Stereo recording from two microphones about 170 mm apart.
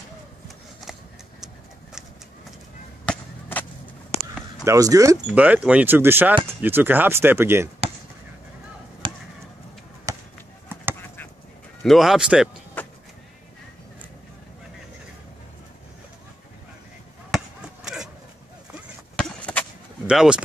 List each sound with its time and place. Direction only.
3.1 s a sound: 10° left (ahead or behind)
4.6 s speech: 20° right (ahead or behind)
5.2 s speech: 10° right (ahead or behind)
9.0 s chop: 30° right (ahead or behind)
10.1 s basketball bounce: 20° right (ahead or behind)
11.8 s a man's voice: centre (ahead or behind)
12.8 s vehicle: 10° left (ahead or behind)
17.8 s vehicle: 5° right (ahead or behind)
19.1 s a sound: 5° left (ahead or behind)
20.1 s speech: 5° right (ahead or behind)